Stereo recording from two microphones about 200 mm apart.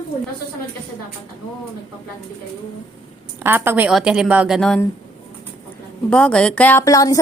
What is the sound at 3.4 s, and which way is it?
A woman's voice, 10° right (ahead or behind).